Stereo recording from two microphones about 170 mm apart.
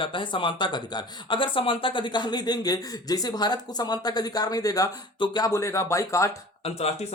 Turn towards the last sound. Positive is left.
turn(degrees=35)  # may be behind; listen again after turning